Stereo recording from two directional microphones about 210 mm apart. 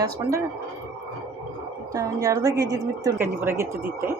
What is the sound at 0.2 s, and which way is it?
Speech, 15° right (ahead or behind).